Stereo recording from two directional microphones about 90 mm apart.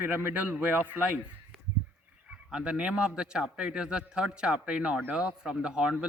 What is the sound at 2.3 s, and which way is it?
A man's voice, 10° right (ahead or behind).